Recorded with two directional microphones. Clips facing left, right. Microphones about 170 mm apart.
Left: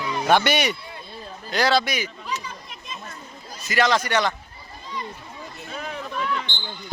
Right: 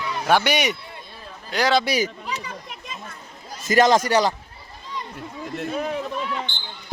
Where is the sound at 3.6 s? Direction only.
45° right (ahead or behind).